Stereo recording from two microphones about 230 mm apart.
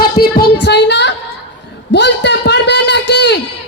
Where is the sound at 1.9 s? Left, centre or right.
Left.